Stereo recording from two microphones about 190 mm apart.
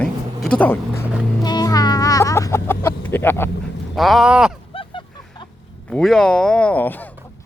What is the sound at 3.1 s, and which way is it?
Speech, 10° left (ahead or behind).